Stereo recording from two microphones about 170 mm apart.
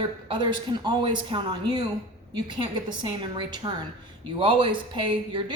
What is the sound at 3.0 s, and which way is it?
A woman's voice, 30° right (ahead or behind).